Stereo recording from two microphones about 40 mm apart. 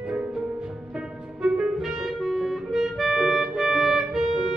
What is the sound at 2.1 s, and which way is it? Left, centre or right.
Music, centre.